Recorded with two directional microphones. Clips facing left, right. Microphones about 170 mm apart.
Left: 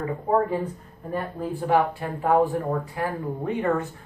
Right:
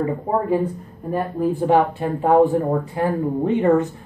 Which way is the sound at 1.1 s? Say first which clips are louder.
Right 7 dB; 20° right (ahead or behind).